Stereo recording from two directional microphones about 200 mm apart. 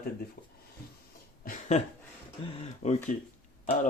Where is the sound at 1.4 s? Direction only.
35° left (ahead or behind).